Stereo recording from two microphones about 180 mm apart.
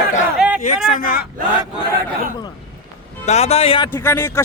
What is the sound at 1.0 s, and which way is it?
Battle cry, 50° left (ahead or behind).